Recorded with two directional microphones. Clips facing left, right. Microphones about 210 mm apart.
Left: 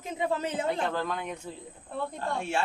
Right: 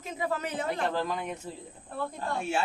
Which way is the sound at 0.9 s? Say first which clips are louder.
Right 1 dB; centre (ahead or behind).